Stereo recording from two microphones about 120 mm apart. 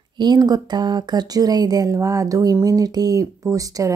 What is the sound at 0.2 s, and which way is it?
Speech, 35° right (ahead or behind).